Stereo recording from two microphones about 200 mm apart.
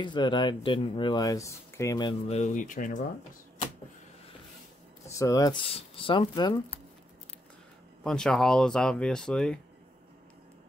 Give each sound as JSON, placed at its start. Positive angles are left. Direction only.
{"t": 0.0, "sound": "speech", "side_deg": 25}
{"t": 2.3, "sound": "speech", "side_deg": 35}
{"t": 5.2, "sound": "speech", "side_deg": 15}
{"t": 8.0, "sound": "speech", "side_deg": 5}